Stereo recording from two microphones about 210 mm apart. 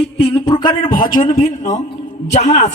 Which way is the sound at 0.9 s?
40° left (ahead or behind).